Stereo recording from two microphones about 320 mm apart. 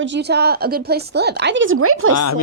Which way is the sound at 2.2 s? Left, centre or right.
Left.